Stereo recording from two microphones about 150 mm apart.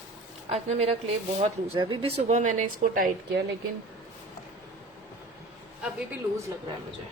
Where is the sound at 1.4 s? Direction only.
35° right (ahead or behind); by 3.4 s 65° right (ahead or behind).